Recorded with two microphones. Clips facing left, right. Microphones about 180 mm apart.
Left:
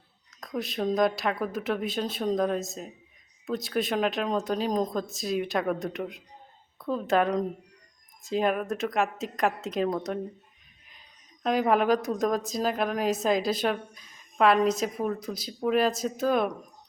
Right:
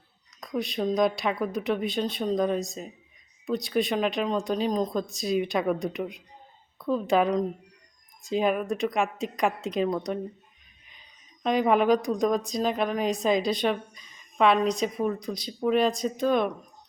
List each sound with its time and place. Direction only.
0.3 s a woman's voice: centre (ahead or behind)
11.4 s a woman's voice: 5° left (ahead or behind)